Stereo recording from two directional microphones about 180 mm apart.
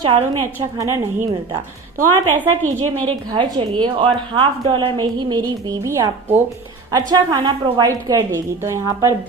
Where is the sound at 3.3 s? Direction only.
25° right (ahead or behind).